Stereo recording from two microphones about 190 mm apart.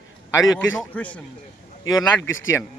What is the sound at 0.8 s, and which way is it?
Speech, 5° left (ahead or behind).